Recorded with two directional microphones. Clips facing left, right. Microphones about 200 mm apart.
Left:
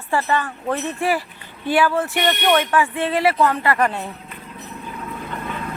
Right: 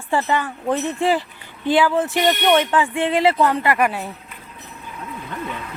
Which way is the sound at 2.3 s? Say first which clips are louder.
Right 1 dB; 5° right (ahead or behind).